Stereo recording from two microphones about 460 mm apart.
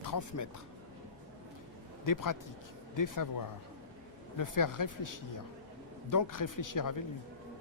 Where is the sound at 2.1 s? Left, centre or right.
Left.